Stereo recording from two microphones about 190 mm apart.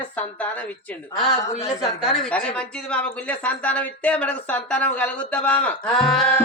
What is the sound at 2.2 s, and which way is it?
Speech, 5° left (ahead or behind).